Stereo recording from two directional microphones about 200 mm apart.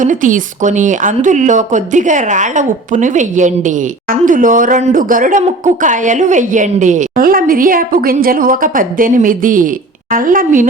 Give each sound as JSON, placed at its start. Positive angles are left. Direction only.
{"t": 0.0, "sound": "speech", "side_deg": -40}